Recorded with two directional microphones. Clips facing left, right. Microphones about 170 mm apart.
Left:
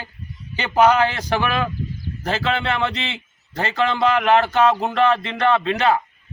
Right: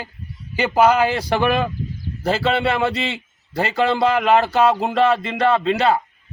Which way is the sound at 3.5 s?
10° right (ahead or behind).